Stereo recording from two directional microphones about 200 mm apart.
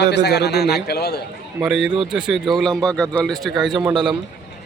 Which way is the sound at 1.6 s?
Centre (ahead or behind).